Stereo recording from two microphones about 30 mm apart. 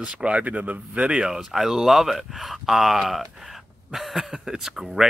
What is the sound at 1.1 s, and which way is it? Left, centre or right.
Speech, right.